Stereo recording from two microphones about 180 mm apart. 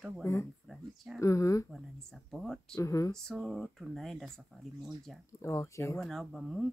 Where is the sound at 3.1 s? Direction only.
Centre (ahead or behind).